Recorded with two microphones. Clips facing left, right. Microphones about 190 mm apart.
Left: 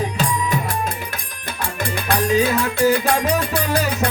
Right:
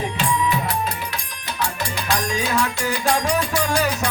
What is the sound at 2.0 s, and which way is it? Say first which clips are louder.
Music: left 7 dB; 55° left (ahead or behind).